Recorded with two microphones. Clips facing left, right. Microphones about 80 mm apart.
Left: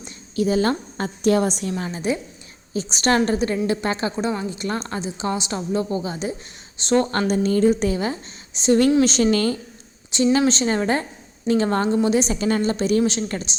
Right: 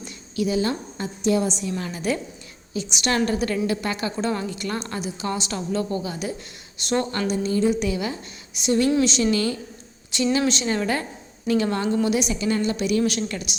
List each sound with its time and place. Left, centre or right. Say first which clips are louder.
0.3 s a woman's voice: left 3 dB; left
1.8 s a woman's voice: left 2 dB; left
2.7 s a woman's voice: left 4 dB; left
4.2 s a woman's voice: left 1 dB; centre
7.0 s a woman's voice: left 4 dB; left
9.0 s a woman's voice: left 3 dB; left